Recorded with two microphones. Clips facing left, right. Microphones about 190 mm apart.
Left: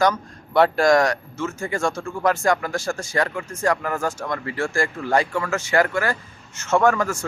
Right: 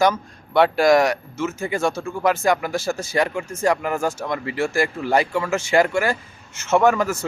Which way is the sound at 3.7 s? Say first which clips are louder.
Right 2 dB; 25° right (ahead or behind).